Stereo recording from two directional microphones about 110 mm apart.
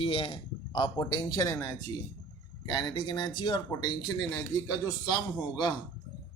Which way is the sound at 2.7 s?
40° left (ahead or behind).